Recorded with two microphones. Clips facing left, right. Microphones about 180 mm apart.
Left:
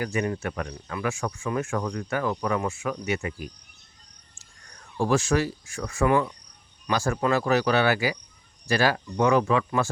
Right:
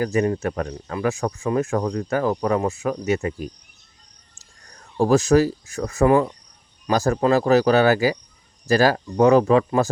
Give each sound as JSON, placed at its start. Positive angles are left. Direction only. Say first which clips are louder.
{"t": 0.0, "sound": "speech", "louder": "right 7 dB", "side_deg": -40}
{"t": 4.9, "sound": "speech", "louder": "right 7 dB", "side_deg": -40}